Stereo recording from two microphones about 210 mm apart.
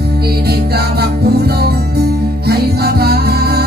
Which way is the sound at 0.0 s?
50° right (ahead or behind).